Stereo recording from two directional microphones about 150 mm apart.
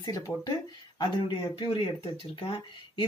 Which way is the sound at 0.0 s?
25° left (ahead or behind).